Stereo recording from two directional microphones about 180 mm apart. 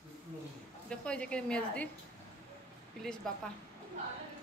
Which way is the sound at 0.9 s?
5° left (ahead or behind).